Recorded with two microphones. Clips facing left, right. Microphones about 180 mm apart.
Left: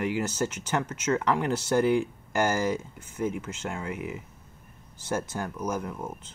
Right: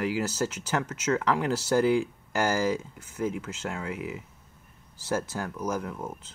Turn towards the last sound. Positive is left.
turn(degrees=5)  # may be behind; listen again after turning